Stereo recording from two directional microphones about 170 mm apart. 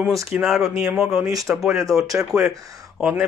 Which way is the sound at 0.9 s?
Centre (ahead or behind).